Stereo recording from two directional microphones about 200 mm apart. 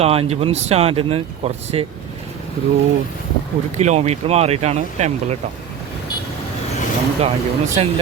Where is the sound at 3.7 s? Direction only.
35° right (ahead or behind).